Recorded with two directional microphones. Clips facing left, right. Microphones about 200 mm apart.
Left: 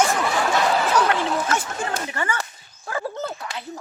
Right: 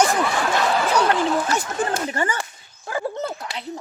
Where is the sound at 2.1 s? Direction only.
40° right (ahead or behind).